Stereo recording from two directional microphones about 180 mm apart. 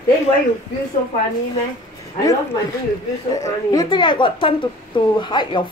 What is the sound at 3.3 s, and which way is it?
Speech, 20° left (ahead or behind).